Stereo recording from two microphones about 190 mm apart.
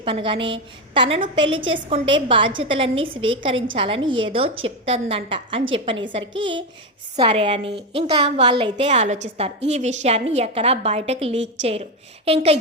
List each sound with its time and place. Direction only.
0.0 s a woman's voice: 30° right (ahead or behind)
6.3 s speech: 75° right (ahead or behind)
7.2 s a woman's voice: 30° right (ahead or behind)